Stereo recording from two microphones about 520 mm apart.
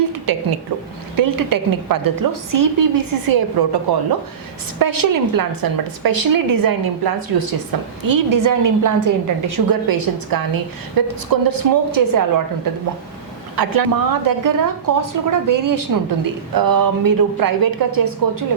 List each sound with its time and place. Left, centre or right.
0.3 s a woman's voice: right
4.8 s a woman's voice: right